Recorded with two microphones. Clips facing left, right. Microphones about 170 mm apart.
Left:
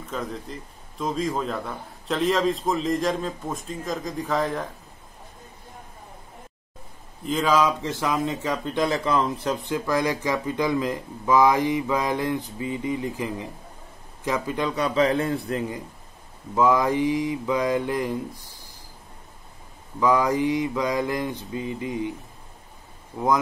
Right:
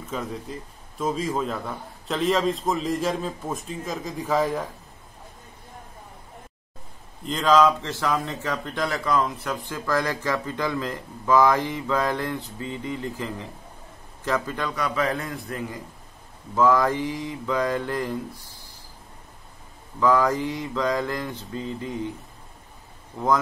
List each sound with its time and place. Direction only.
0.1 s a man's voice: centre (ahead or behind)
7.2 s a man's voice: 5° left (ahead or behind)
20.0 s speech: 15° left (ahead or behind)